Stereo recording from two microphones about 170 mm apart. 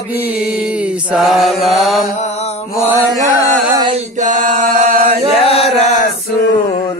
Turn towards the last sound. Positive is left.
turn(degrees=40)  # may be behind; listen again after turning